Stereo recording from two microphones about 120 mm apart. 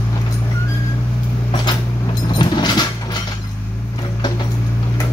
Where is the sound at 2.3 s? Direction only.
40° left (ahead or behind).